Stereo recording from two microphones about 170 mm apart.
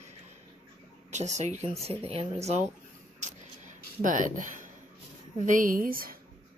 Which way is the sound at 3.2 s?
45° right (ahead or behind).